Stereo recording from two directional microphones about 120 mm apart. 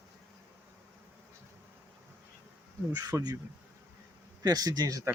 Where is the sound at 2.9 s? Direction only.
30° right (ahead or behind).